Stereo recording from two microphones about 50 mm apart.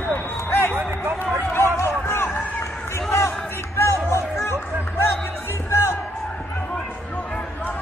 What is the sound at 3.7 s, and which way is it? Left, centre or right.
Music, left.